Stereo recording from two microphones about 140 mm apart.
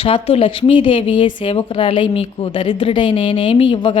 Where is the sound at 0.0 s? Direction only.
45° left (ahead or behind).